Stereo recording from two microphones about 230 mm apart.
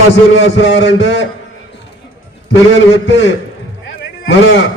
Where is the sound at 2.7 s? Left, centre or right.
Left.